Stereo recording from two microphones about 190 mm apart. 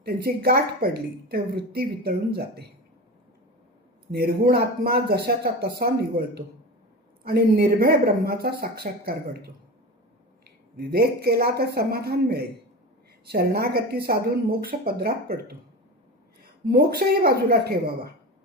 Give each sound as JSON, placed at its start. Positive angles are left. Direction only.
{"t": 0.0, "sound": "speech", "side_deg": -55}
{"t": 4.1, "sound": "a woman's voice", "side_deg": -55}